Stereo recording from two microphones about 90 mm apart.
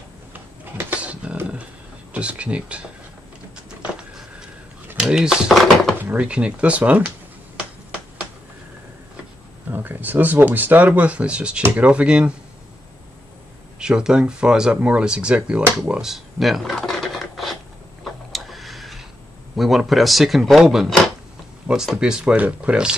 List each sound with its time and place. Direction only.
0.3 s a sound: 20° right (ahead or behind)
2.1 s speech: 15° right (ahead or behind)
4.9 s speech: 10° right (ahead or behind)
9.7 s speech: 20° right (ahead or behind)
13.7 s speech: 10° right (ahead or behind)
15.8 s a sound: 10° right (ahead or behind)
18.0 s tick-tock: centre (ahead or behind)
19.5 s speech: centre (ahead or behind)